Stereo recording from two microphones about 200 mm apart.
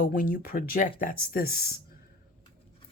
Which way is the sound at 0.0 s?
45° left (ahead or behind).